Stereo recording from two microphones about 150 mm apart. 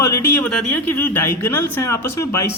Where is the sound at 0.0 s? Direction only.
15° left (ahead or behind).